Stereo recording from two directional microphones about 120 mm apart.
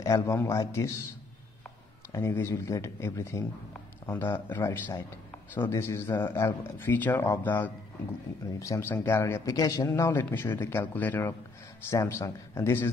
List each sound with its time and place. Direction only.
0.0 s speech: 25° left (ahead or behind)
2.1 s speech: 25° left (ahead or behind)
8.5 s speech: 25° left (ahead or behind)
11.9 s speech: 25° left (ahead or behind)